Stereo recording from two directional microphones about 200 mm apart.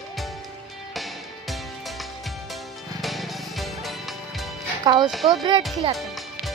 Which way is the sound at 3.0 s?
Centre (ahead or behind).